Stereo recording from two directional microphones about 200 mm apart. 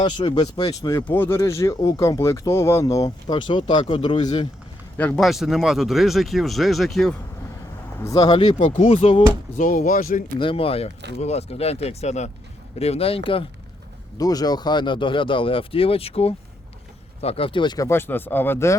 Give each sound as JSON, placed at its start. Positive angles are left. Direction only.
{"t": 0.0, "sound": "speech", "side_deg": 25}
{"t": 4.9, "sound": "speech", "side_deg": 5}
{"t": 7.9, "sound": "speech", "side_deg": 15}
{"t": 8.4, "sound": "speech", "side_deg": 35}
{"t": 9.6, "sound": "speech", "side_deg": 40}
{"t": 10.3, "sound": "speech", "side_deg": 25}